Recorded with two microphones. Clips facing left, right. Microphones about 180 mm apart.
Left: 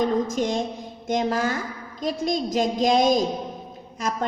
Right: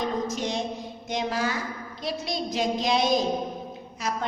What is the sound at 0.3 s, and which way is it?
Child singing, 50° left (ahead or behind).